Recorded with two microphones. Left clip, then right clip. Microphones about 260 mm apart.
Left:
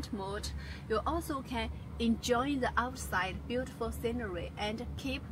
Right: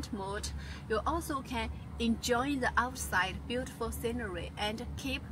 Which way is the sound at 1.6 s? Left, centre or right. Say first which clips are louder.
Even; right.